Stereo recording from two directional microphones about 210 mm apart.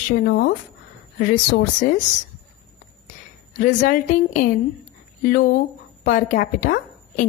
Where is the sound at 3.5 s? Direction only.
40° left (ahead or behind).